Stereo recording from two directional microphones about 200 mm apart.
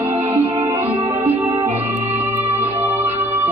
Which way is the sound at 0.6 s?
10° right (ahead or behind).